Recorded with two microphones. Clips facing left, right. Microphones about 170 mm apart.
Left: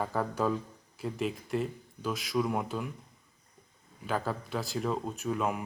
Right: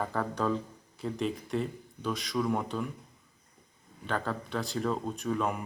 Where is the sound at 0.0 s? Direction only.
5° left (ahead or behind).